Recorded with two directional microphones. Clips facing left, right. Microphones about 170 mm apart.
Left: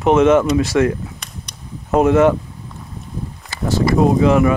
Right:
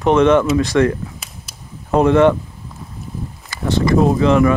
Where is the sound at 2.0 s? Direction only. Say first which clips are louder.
Right 1 dB; 5° left (ahead or behind).